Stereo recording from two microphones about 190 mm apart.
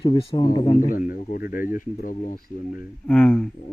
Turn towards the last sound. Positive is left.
turn(degrees=5)  # may be behind; listen again after turning